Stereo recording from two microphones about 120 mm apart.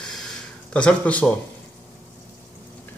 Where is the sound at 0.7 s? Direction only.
10° left (ahead or behind).